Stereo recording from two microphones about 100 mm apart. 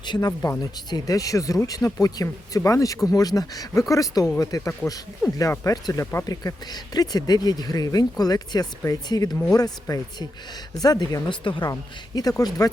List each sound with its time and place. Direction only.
0.0 s speech: 45° left (ahead or behind)
10.8 s speech: 40° left (ahead or behind)
11.3 s speech: 55° left (ahead or behind)
11.7 s speech: 40° left (ahead or behind)